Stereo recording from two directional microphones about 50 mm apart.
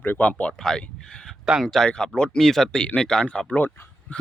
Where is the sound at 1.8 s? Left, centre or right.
Centre.